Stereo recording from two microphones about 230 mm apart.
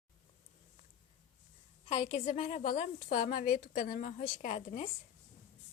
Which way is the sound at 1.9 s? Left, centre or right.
Left.